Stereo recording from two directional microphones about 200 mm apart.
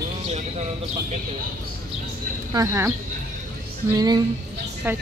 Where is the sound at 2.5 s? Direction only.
15° right (ahead or behind).